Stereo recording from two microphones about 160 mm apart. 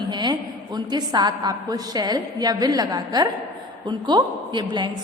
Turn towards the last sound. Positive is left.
turn(degrees=-30)  # may be behind; listen again after turning